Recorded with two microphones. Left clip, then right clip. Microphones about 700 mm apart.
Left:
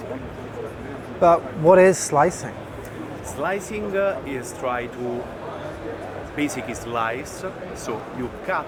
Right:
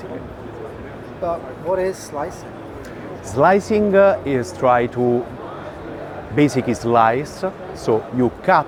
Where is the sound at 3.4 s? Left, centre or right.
Right.